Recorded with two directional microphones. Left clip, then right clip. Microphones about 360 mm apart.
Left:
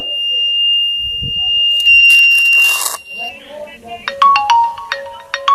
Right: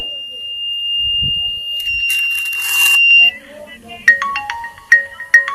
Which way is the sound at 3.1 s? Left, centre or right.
Left.